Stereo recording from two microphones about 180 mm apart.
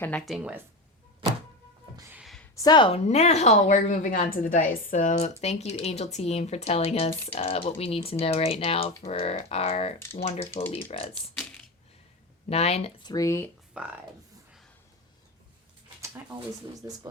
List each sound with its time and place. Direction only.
0.0 s speech: 5° left (ahead or behind)
2.0 s gasp: 10° right (ahead or behind)
2.2 s a sound: centre (ahead or behind)
2.6 s a woman's voice: 25° left (ahead or behind)
10.4 s speech: 15° left (ahead or behind)
10.7 s a woman's voice: 30° left (ahead or behind)
12.5 s a woman's voice: 35° left (ahead or behind)
13.0 s speech: 20° left (ahead or behind)
13.7 s speech: 5° right (ahead or behind)
16.0 s a sound: 15° right (ahead or behind)